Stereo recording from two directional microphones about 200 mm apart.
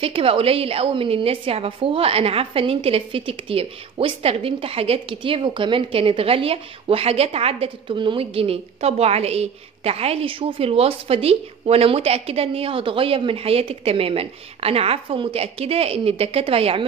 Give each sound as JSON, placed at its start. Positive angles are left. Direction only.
{"t": 0.0, "sound": "a woman's voice", "side_deg": -30}